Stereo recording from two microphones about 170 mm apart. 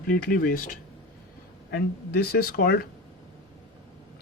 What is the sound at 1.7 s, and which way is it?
A man's voice, 70° left (ahead or behind).